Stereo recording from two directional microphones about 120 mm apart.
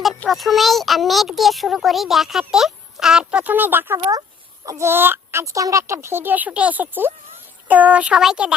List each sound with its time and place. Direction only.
0.3 s a child's voice: centre (ahead or behind)